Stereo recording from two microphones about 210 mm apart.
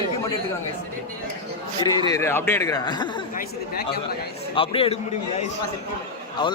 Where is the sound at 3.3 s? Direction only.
45° left (ahead or behind).